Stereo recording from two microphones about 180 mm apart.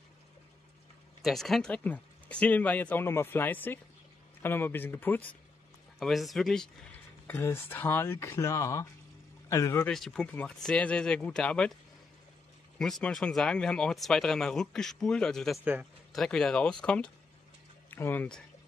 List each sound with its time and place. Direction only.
1.2 s speech: centre (ahead or behind)
5.9 s speech: centre (ahead or behind)
7.2 s speech: 15° left (ahead or behind)
9.8 s speech: 5° left (ahead or behind)
12.7 s speech: 5° left (ahead or behind)
15.6 s a sound: 10° right (ahead or behind)
16.2 s speech: 5° left (ahead or behind)